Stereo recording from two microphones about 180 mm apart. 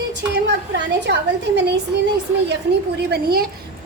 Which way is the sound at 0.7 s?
70° right (ahead or behind).